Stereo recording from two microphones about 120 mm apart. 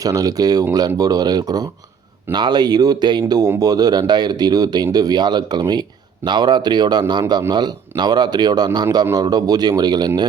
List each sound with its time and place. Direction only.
0.0 s speech: 30° right (ahead or behind)